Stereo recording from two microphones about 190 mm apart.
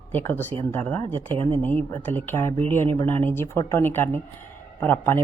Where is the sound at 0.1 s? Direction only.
10° left (ahead or behind).